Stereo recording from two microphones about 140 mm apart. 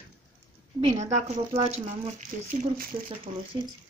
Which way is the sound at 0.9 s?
55° right (ahead or behind).